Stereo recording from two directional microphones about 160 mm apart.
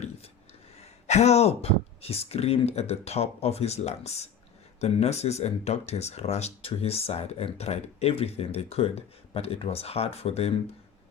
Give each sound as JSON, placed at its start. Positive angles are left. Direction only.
{"t": 0.8, "sound": "speech", "side_deg": 45}